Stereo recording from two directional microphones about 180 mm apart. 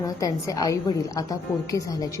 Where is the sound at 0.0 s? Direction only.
20° left (ahead or behind).